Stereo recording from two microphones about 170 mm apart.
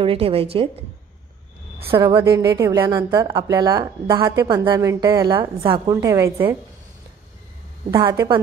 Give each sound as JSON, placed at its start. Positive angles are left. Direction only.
{"t": 0.0, "sound": "a woman's voice", "side_deg": -35}
{"t": 2.0, "sound": "a woman's voice", "side_deg": -20}
{"t": 6.0, "sound": "a woman's voice", "side_deg": -15}
{"t": 7.9, "sound": "a woman's voice", "side_deg": -20}